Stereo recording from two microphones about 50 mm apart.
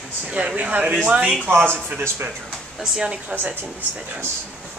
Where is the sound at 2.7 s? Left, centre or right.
Centre.